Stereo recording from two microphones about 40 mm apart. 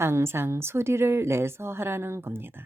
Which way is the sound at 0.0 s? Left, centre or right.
Right.